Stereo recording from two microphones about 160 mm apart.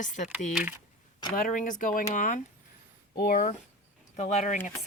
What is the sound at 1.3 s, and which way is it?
Speech, 55° left (ahead or behind).